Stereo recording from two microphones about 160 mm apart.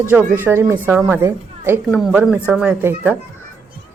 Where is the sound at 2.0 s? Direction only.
Centre (ahead or behind).